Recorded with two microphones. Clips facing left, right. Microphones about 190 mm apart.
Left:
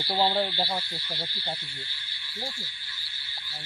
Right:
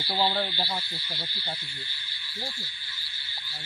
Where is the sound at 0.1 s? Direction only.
25° left (ahead or behind).